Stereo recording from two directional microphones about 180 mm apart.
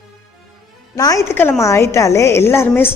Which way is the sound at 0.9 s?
20° left (ahead or behind).